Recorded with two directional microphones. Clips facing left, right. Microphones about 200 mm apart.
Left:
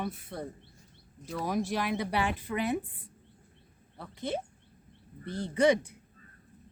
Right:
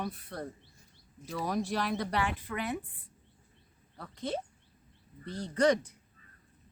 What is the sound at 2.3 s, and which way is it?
Speech, 20° left (ahead or behind).